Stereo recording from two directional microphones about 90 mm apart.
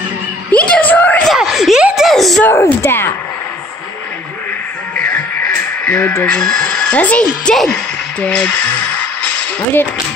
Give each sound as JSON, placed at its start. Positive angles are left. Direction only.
{"t": 0.5, "sound": "a sound", "side_deg": 15}
{"t": 1.2, "sound": "screaming", "side_deg": 0}
{"t": 2.0, "sound": "a sound", "side_deg": 0}
{"t": 2.4, "sound": "speech", "side_deg": 30}
{"t": 4.9, "sound": "music", "side_deg": 15}
{"t": 6.4, "sound": "speech", "side_deg": 5}